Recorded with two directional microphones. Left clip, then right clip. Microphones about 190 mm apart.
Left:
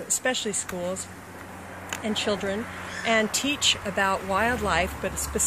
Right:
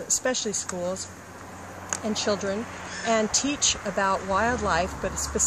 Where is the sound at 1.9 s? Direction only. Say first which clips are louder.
Even; 5° left (ahead or behind).